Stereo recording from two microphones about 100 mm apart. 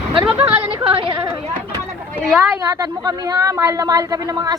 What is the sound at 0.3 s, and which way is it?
Speech, 15° right (ahead or behind).